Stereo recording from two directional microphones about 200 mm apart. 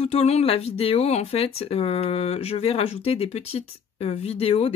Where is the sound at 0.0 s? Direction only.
30° left (ahead or behind).